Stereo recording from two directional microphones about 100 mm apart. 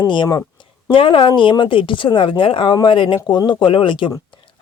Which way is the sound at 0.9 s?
60° left (ahead or behind).